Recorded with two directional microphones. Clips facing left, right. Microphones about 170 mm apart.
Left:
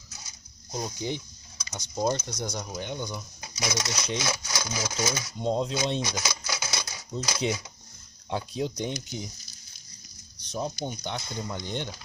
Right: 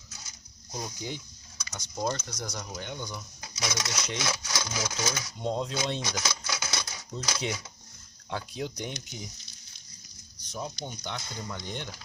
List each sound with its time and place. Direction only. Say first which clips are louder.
0.7 s speech: left 5 dB; 20° left (ahead or behind)
6.1 s cash register: left 1 dB; 10° left (ahead or behind)
8.3 s speech: left 4 dB; 20° left (ahead or behind)
10.8 s speech: left 4 dB; 15° left (ahead or behind)